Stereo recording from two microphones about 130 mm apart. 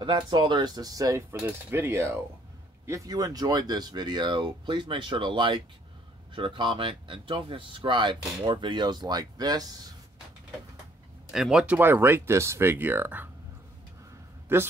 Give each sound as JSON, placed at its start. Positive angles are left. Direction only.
{"t": 0.0, "sound": "cutlery", "side_deg": -35}
{"t": 2.9, "sound": "speech", "side_deg": -30}
{"t": 11.3, "sound": "speech", "side_deg": -5}
{"t": 14.5, "sound": "speech", "side_deg": -15}